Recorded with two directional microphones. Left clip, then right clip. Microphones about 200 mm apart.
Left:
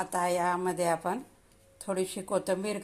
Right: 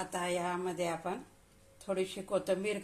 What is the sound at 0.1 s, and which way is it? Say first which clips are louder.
A woman's voice: left 7 dB; 25° left (ahead or behind).